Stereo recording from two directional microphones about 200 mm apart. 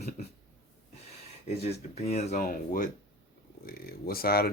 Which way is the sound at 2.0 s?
35° left (ahead or behind).